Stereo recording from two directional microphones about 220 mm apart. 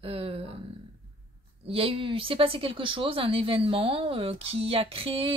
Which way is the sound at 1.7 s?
25° right (ahead or behind).